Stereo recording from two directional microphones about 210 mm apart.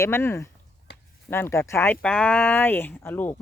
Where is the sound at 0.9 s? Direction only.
55° left (ahead or behind).